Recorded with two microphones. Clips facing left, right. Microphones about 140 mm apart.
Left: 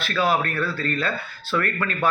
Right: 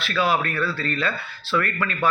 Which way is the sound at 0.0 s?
45° left (ahead or behind).